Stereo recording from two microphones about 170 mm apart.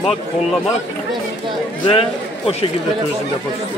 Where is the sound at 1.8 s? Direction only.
35° left (ahead or behind).